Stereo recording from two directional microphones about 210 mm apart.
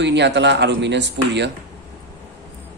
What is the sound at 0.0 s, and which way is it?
Speech, 55° right (ahead or behind).